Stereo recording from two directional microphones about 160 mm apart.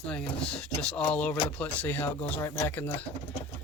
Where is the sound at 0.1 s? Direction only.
5° left (ahead or behind).